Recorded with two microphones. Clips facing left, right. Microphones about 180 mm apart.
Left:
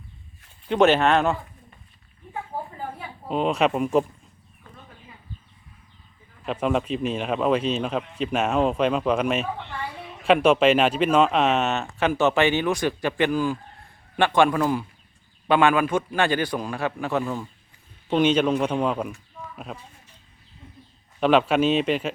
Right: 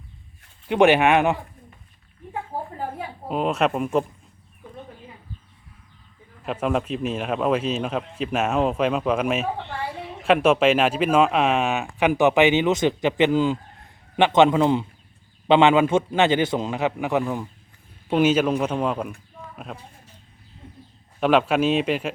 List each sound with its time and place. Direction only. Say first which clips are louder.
0.7 s speech: right 2 dB; 15° right (ahead or behind)
3.2 s speech: even; centre (ahead or behind)
6.4 s a man's voice: even; centre (ahead or behind)
21.2 s speech: even; centre (ahead or behind)